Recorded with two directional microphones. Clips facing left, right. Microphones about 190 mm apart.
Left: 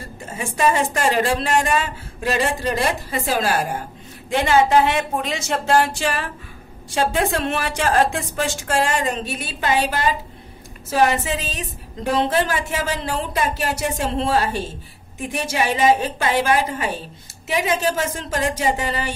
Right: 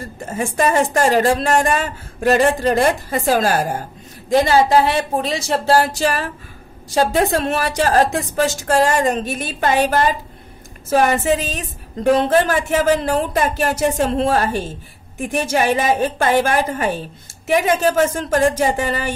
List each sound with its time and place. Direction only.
0.4 s a woman's voice: 45° right (ahead or behind)